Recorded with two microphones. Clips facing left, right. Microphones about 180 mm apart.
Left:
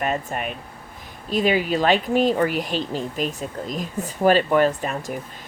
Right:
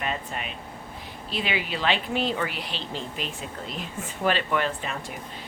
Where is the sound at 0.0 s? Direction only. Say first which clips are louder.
Left 6 dB; 50° left (ahead or behind).